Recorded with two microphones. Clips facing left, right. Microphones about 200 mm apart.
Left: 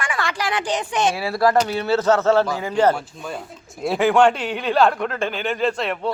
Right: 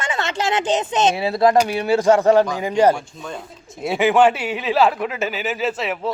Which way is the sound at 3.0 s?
5° left (ahead or behind).